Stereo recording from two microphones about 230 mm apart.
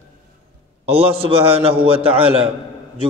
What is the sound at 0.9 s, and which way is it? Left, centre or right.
A man's voice, right.